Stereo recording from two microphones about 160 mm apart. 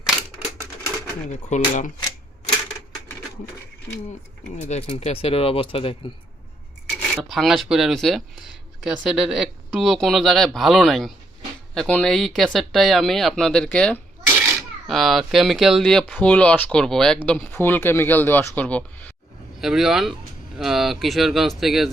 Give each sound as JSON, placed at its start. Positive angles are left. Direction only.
{"t": 0.0, "sound": "typewriter", "side_deg": 0}
{"t": 1.5, "sound": "speech", "side_deg": 50}
{"t": 4.7, "sound": "speech", "side_deg": 40}
{"t": 7.1, "sound": "speech", "side_deg": 0}
{"t": 19.6, "sound": "speech", "side_deg": 0}